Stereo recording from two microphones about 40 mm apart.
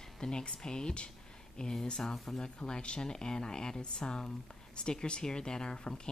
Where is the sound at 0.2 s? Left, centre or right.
Left.